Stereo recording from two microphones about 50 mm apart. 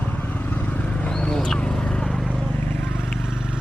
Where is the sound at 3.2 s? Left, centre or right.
Centre.